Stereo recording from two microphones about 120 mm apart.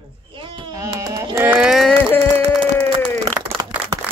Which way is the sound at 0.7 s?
30° right (ahead or behind).